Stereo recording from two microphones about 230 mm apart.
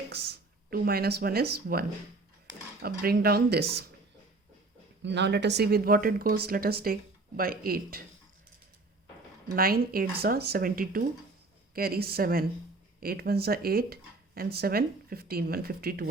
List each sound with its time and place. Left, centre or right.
0.7 s speech: right
2.8 s speech: right
5.0 s speech: right
9.6 s speech: right